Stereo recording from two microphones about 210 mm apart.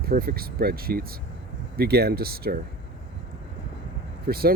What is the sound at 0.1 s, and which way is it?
Speech, 45° right (ahead or behind).